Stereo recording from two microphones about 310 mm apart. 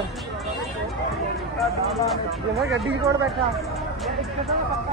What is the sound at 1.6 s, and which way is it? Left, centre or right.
Speech, centre.